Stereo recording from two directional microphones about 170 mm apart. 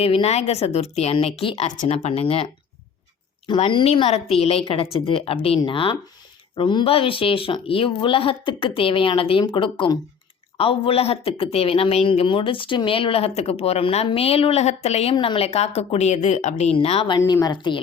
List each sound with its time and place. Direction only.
0.0 s a woman's voice: 35° left (ahead or behind)
17.2 s a woman's voice: 20° left (ahead or behind)